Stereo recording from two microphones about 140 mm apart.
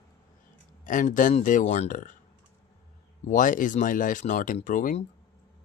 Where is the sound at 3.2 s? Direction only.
70° left (ahead or behind).